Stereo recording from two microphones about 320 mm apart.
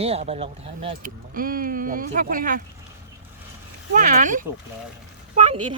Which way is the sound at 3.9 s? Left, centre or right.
Right.